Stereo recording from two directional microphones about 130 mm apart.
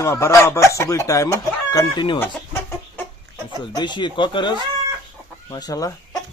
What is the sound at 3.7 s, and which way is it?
Speech, 35° left (ahead or behind).